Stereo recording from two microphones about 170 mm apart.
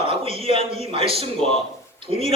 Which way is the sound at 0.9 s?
35° right (ahead or behind).